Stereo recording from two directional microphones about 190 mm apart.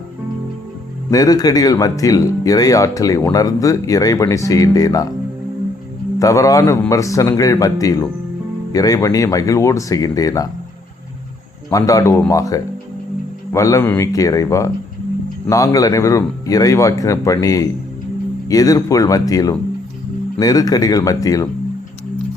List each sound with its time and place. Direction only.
1.1 s speech: 20° left (ahead or behind)
6.1 s a man's voice: 15° left (ahead or behind)
11.7 s a man's voice: 15° left (ahead or behind)